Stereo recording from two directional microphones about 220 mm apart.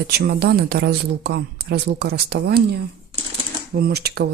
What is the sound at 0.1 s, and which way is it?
Speech, 45° right (ahead or behind).